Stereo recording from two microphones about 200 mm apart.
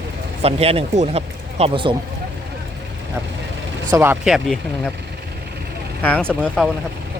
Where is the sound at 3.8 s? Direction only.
15° right (ahead or behind).